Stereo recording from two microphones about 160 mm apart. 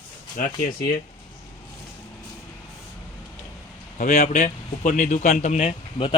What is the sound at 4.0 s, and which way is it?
Speech, 55° left (ahead or behind).